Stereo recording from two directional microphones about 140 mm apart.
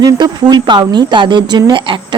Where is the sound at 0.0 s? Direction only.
30° right (ahead or behind).